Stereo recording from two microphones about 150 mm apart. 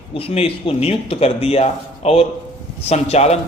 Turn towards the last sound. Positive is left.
turn(degrees=45)  # may be behind; listen again after turning